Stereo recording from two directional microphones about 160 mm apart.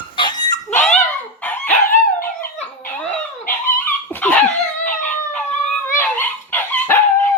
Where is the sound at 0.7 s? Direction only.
10° left (ahead or behind).